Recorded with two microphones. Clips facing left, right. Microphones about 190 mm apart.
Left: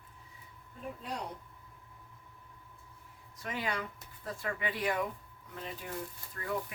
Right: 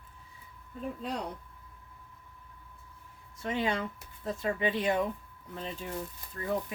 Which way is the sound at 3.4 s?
25° right (ahead or behind).